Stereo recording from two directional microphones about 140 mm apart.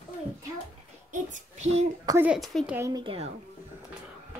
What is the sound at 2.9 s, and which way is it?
Speech, 35° right (ahead or behind).